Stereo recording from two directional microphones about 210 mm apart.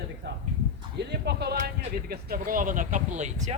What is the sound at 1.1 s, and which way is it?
A man's voice, 50° right (ahead or behind).